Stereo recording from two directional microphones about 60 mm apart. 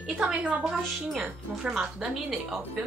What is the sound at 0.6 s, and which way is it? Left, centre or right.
Speech, centre.